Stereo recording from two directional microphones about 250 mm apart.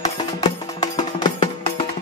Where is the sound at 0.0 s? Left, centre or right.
Centre.